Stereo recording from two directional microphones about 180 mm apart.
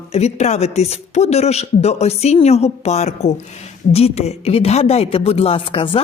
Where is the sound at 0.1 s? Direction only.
35° left (ahead or behind).